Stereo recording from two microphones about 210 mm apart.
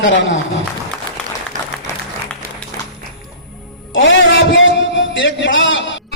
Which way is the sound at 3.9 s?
60° left (ahead or behind).